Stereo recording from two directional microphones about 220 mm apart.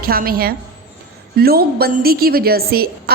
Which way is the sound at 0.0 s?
45° right (ahead or behind).